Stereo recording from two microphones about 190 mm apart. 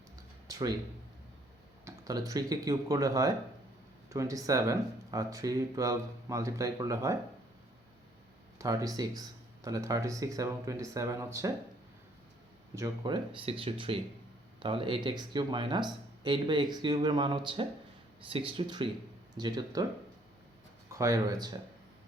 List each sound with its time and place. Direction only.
1.8 s speech: 20° right (ahead or behind)
8.5 s speech: 15° right (ahead or behind)
12.7 s speech: 20° right (ahead or behind)
21.0 s speech: 20° right (ahead or behind)